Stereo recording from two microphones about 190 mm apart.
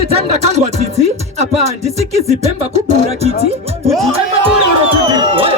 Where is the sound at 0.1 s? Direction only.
35° right (ahead or behind).